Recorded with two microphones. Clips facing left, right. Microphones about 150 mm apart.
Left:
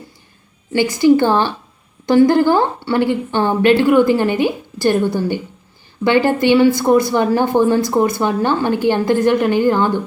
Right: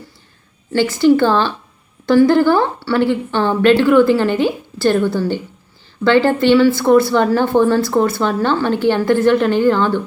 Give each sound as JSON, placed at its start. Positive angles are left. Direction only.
{"t": 0.7, "sound": "speech", "side_deg": 15}